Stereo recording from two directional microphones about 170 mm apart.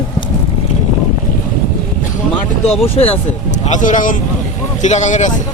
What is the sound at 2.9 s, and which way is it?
Speech, 35° left (ahead or behind).